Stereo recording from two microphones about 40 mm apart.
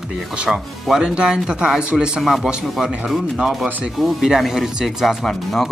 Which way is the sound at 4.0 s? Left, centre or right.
Centre.